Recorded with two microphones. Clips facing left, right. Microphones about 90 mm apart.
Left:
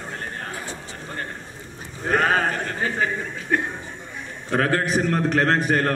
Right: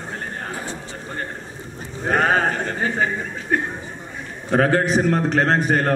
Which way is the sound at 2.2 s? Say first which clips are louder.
Right 2 dB; 25° right (ahead or behind).